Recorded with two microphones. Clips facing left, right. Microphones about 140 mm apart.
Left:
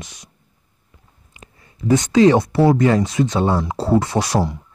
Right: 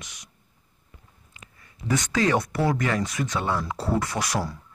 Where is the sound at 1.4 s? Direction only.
25° left (ahead or behind).